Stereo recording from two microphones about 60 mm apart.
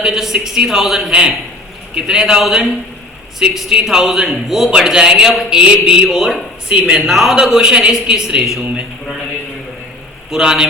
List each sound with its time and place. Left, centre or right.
0.0 s a man's voice: centre
7.1 s a man's voice: centre
10.3 s a man's voice: centre